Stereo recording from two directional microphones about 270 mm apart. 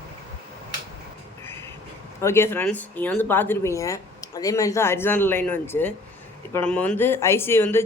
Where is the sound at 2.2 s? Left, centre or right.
Centre.